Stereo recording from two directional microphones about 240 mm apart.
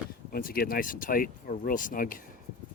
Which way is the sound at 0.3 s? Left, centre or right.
Left.